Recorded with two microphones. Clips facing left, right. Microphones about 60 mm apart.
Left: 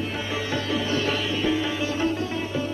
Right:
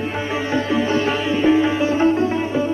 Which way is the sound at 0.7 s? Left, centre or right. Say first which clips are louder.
Right 5 dB; right.